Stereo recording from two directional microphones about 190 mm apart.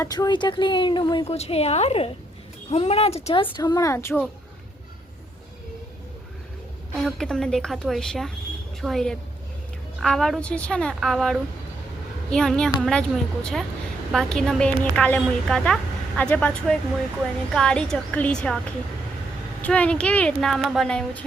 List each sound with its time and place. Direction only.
0.0 s a woman's voice: 20° left (ahead or behind)
3.6 s a woman's voice: 20° left (ahead or behind)
6.9 s a woman's voice: centre (ahead or behind)
19.6 s a woman's voice: 5° left (ahead or behind)